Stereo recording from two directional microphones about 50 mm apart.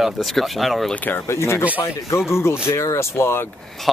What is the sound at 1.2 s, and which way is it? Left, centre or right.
Speech, left.